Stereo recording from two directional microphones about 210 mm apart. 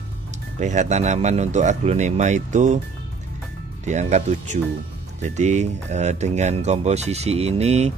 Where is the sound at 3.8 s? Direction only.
35° right (ahead or behind).